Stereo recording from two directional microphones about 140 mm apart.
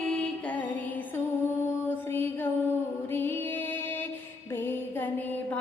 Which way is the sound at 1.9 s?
15° left (ahead or behind).